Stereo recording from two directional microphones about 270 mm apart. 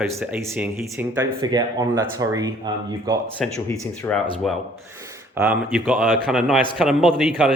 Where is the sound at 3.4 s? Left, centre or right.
Centre.